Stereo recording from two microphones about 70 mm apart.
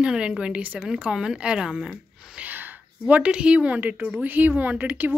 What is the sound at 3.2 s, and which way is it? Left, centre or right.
A woman's voice, centre.